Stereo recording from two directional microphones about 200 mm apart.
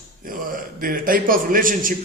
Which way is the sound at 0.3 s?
45° right (ahead or behind).